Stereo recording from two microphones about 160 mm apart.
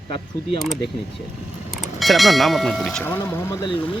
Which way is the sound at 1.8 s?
Centre (ahead or behind).